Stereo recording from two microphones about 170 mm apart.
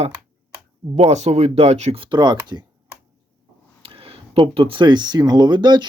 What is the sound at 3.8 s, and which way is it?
Speech, 35° right (ahead or behind).